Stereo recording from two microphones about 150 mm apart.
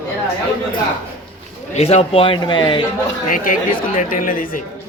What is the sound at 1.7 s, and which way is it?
A man's voice, 45° left (ahead or behind).